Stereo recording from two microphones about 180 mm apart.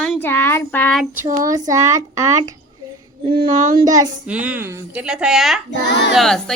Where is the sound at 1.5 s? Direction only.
20° right (ahead or behind).